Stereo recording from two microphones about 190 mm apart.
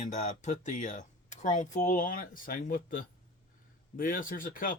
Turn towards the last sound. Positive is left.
turn(degrees=45)  # may be behind; listen again after turning